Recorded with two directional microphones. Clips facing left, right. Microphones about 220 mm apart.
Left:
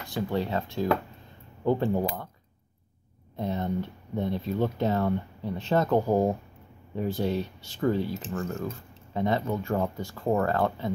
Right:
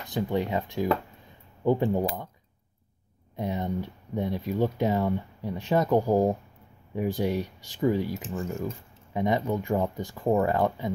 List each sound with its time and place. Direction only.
0.0 s speech: 15° right (ahead or behind)
3.3 s speech: 15° right (ahead or behind)